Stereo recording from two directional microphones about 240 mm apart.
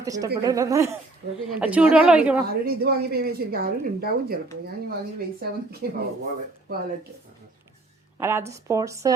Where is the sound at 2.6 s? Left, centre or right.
Right.